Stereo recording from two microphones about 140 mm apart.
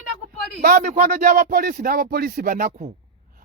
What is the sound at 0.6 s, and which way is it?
Speech, 90° right.